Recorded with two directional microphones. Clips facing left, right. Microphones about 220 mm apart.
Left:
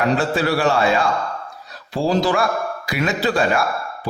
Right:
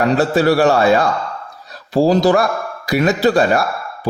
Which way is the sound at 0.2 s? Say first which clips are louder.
Right 6 dB; 40° right (ahead or behind).